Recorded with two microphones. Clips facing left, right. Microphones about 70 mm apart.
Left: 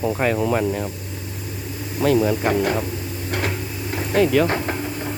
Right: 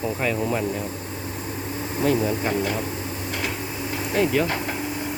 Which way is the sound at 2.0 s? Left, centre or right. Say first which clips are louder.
Left 4 dB; left.